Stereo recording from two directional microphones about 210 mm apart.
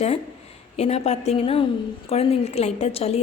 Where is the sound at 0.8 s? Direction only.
30° left (ahead or behind).